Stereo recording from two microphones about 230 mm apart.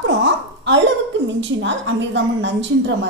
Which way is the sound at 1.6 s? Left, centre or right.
Right.